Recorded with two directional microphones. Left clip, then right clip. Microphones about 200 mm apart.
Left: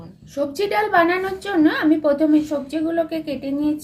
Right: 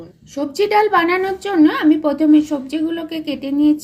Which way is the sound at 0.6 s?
50° right (ahead or behind).